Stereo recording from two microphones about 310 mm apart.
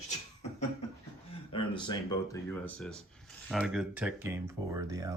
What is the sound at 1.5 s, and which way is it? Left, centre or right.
Speech, centre.